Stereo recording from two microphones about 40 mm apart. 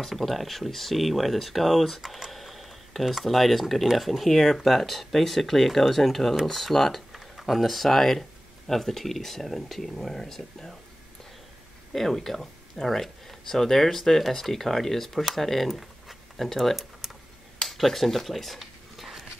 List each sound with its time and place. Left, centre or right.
0.0 s speech: centre
11.9 s speech: centre
15.7 s a sound: centre